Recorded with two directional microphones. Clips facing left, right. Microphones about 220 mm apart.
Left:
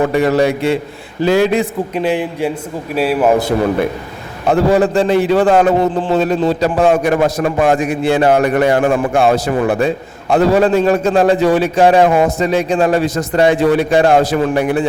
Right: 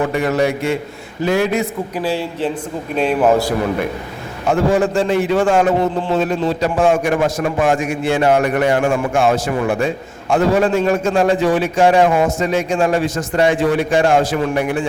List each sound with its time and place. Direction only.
0.1 s a man's voice: 30° left (ahead or behind)
2.9 s a man's voice: 5° left (ahead or behind)
4.4 s a man's voice: 35° left (ahead or behind)